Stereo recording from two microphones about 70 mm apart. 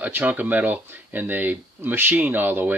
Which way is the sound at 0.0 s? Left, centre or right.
Right.